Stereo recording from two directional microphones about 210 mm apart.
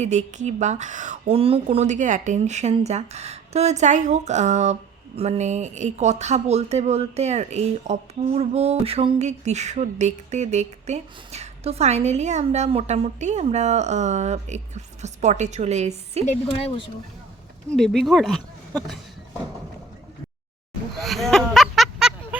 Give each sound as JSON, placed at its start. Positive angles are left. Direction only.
{"t": 0.0, "sound": "speech", "side_deg": -35}
{"t": 16.2, "sound": "a woman's voice", "side_deg": 30}
{"t": 17.7, "sound": "speech", "side_deg": 5}
{"t": 21.0, "sound": "a sound", "side_deg": 0}